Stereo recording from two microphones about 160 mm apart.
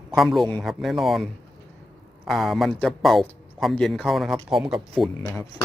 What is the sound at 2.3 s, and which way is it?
A man's voice, centre (ahead or behind).